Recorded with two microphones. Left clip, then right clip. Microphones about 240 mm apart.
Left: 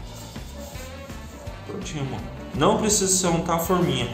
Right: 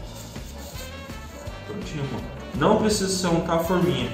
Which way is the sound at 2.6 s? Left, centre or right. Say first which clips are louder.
Even; left.